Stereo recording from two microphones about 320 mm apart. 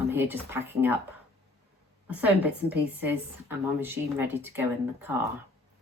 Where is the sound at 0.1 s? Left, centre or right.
Centre.